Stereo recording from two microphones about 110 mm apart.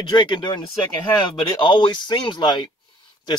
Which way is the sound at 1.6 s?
45° left (ahead or behind).